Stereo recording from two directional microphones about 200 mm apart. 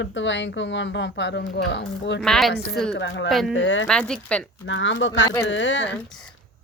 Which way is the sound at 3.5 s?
70° left (ahead or behind).